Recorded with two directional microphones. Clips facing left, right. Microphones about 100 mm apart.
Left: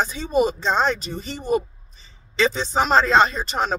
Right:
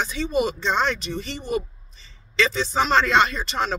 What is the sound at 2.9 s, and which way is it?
Speech, 30° left (ahead or behind).